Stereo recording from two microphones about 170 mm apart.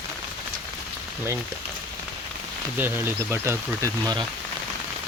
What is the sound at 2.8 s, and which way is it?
Speech, 10° right (ahead or behind).